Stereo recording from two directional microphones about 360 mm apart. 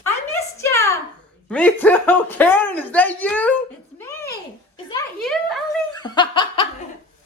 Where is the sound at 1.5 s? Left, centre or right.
Centre.